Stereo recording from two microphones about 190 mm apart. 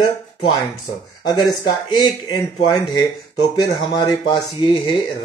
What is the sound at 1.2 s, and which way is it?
Speech, 20° left (ahead or behind).